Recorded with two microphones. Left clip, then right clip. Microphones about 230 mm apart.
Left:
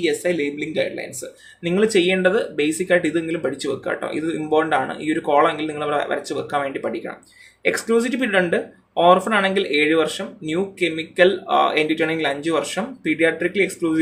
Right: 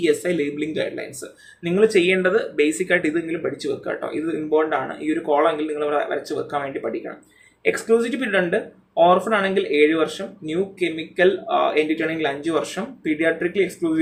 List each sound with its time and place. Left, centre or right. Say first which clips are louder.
0.0 s speech: even; centre
1.6 s speech: right 1 dB; centre